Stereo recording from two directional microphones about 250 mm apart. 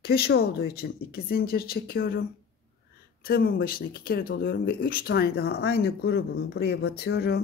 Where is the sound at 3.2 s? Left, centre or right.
Left.